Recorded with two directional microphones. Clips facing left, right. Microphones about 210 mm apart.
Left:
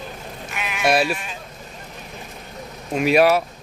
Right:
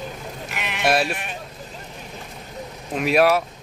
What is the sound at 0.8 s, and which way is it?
Speech, centre (ahead or behind).